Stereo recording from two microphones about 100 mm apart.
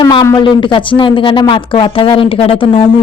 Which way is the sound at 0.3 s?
55° left (ahead or behind).